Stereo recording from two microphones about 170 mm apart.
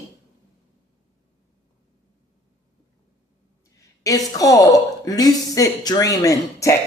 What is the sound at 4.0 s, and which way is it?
A woman's voice, 20° left (ahead or behind).